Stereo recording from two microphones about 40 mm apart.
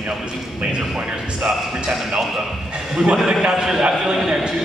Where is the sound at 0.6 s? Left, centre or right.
Right.